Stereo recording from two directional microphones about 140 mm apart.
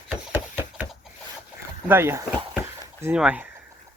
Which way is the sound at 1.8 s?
15° right (ahead or behind).